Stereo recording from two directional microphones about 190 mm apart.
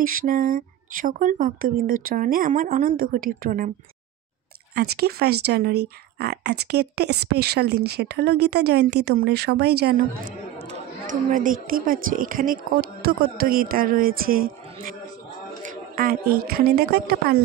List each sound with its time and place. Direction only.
0.0 s a woman's voice: 45° right (ahead or behind)
4.7 s speech: 55° right (ahead or behind)
10.7 s a woman's voice: 45° right (ahead or behind)